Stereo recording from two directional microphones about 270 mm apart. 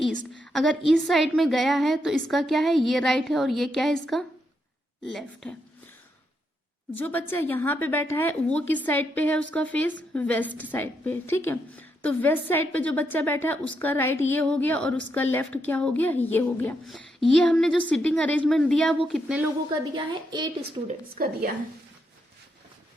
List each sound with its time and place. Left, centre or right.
0.5 s a woman's voice: centre
6.9 s a woman's voice: centre
20.8 s a woman's voice: right